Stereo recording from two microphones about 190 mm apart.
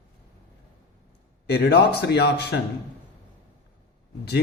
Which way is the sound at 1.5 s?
60° left (ahead or behind).